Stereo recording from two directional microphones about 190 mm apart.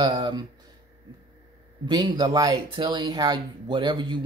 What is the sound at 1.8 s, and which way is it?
Speech, 20° right (ahead or behind).